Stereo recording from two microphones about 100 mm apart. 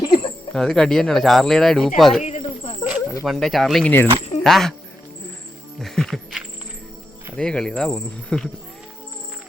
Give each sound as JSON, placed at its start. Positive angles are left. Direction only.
{"t": 0.0, "sound": "cricket", "side_deg": 50}
{"t": 0.5, "sound": "speech", "side_deg": 5}
{"t": 2.2, "sound": "snake", "side_deg": 80}
{"t": 3.2, "sound": "speech", "side_deg": 0}
{"t": 3.8, "sound": "speech", "side_deg": 20}
{"t": 4.4, "sound": "speech", "side_deg": 0}
{"t": 5.8, "sound": "music", "side_deg": 5}
{"t": 7.3, "sound": "speech", "side_deg": 5}